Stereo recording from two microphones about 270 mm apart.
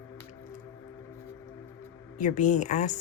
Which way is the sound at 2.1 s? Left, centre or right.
Left.